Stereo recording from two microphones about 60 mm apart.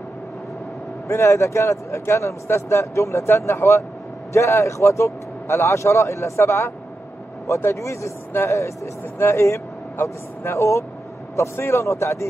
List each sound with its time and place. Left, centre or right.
1.0 s speech: left